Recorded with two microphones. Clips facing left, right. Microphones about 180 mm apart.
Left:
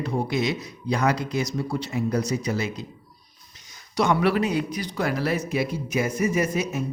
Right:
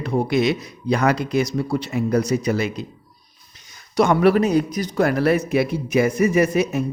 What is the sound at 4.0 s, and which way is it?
Speech, 45° right (ahead or behind).